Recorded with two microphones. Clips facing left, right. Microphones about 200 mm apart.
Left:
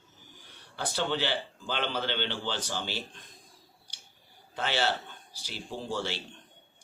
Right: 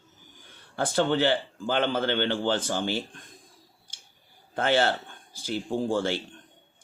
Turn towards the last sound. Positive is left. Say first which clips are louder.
# right 8 dB
turn(degrees=-50)  # may be behind; listen again after turning